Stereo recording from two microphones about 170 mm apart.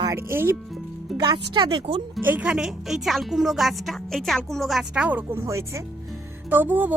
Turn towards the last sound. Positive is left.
turn(degrees=-10)  # may be behind; listen again after turning